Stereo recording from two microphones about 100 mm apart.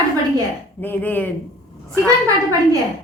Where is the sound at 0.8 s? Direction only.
20° left (ahead or behind).